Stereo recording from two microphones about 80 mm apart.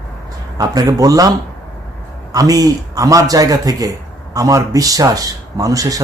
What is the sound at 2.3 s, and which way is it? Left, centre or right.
Speech, right.